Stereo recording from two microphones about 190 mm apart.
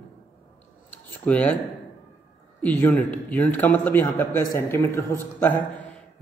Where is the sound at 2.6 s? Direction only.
10° left (ahead or behind).